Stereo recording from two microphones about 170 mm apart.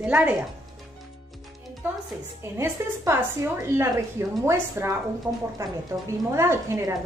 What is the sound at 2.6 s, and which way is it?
A woman's voice, 15° right (ahead or behind).